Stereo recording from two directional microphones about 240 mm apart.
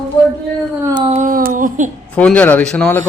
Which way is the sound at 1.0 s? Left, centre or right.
Right.